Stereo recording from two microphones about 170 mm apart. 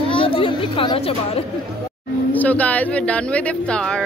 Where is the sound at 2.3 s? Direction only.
10° left (ahead or behind).